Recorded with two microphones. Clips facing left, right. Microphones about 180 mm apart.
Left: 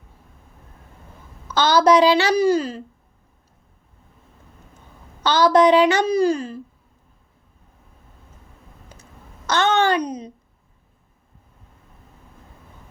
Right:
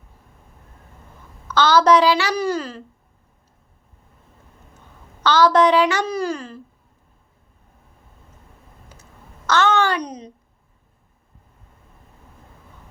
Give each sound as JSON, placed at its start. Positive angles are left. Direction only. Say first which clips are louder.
{"t": 1.5, "sound": "a woman's voice", "louder": "even", "side_deg": 15}
{"t": 5.2, "sound": "a woman's voice", "louder": "even", "side_deg": 15}
{"t": 9.5, "sound": "a child's voice", "louder": "even", "side_deg": 20}
{"t": 10.0, "sound": "a woman's voice", "louder": "left 4 dB", "side_deg": 10}